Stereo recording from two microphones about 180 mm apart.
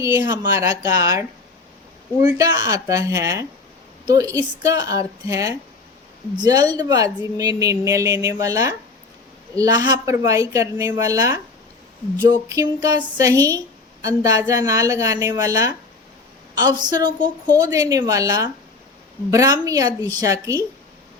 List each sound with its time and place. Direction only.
0.0 s speech: 15° right (ahead or behind)
2.2 s a woman's voice: 20° right (ahead or behind)
12.5 s a woman's voice: 20° right (ahead or behind)